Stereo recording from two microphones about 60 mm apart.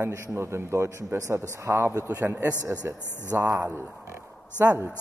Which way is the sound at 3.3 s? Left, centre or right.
Right.